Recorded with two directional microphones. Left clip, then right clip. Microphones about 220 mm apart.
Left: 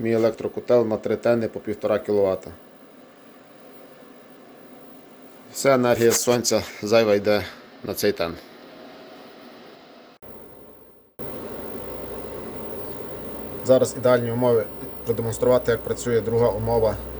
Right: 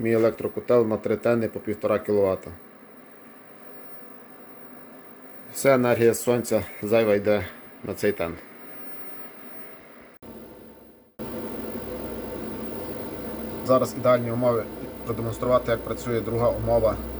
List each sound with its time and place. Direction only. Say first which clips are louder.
0.0 s speech: left 1 dB; centre (ahead or behind)
5.5 s speech: left 1 dB; centre (ahead or behind)
13.7 s speech: left 3 dB; 25° left (ahead or behind)